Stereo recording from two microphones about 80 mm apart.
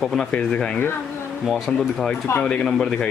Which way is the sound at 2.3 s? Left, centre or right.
Left.